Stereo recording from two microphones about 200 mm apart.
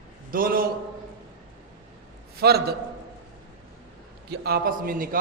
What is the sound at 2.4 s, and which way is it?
Speech, 50° right (ahead or behind).